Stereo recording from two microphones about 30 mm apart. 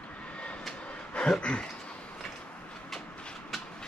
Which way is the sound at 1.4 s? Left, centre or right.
Left.